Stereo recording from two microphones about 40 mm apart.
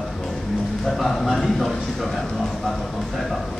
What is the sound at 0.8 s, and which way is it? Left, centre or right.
Speech, centre.